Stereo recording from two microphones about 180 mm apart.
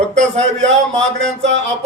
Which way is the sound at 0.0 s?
40° right (ahead or behind).